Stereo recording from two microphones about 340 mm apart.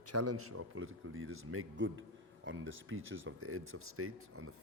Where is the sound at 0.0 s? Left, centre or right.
Right.